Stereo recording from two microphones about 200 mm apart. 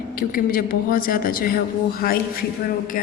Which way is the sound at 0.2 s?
45° left (ahead or behind).